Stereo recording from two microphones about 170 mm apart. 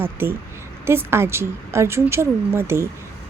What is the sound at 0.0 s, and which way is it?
A woman's voice, 15° right (ahead or behind).